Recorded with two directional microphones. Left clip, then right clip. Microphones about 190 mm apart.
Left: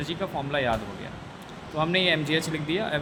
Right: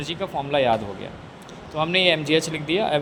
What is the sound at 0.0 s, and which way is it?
Speech, 15° right (ahead or behind).